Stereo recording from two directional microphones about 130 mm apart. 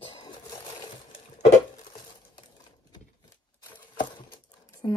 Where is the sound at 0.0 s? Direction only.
40° left (ahead or behind).